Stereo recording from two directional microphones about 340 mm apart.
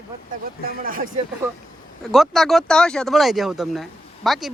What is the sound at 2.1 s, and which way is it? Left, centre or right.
Speech, centre.